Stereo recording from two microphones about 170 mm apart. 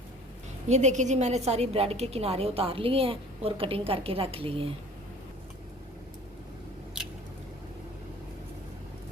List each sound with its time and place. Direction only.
0.7 s a woman's voice: 40° right (ahead or behind)